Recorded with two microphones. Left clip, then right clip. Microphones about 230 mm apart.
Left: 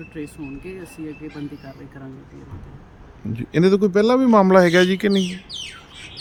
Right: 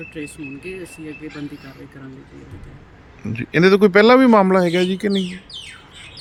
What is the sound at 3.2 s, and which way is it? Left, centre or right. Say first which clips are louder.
Speech: right 3 dB; centre.